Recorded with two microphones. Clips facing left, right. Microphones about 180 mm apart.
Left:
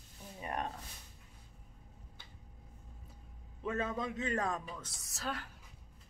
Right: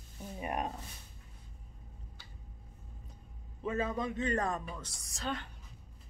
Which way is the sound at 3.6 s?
Centre (ahead or behind).